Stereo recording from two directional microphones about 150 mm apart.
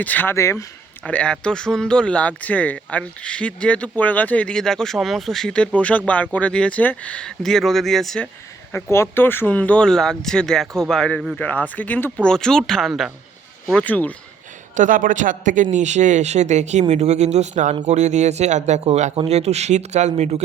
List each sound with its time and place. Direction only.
0.0 s speech: 10° left (ahead or behind)
8.7 s speech: 15° left (ahead or behind)
14.8 s speech: 65° right (ahead or behind); by 20.4 s 50° right (ahead or behind)